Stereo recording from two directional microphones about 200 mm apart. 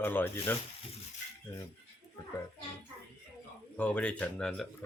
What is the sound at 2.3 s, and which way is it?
Speech, 15° left (ahead or behind).